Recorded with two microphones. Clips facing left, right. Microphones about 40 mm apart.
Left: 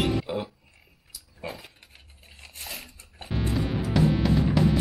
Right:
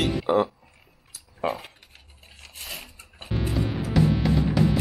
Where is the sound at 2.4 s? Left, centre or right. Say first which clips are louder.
Right 1 dB; centre.